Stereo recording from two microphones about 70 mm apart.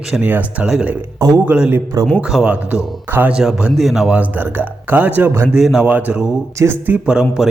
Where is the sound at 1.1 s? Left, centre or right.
Right.